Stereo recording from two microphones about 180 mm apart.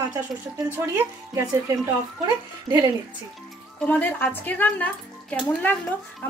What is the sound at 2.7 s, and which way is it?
Speech, 15° right (ahead or behind).